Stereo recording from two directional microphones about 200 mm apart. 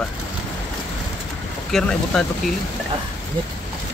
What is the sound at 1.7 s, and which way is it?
Speech, 5° left (ahead or behind).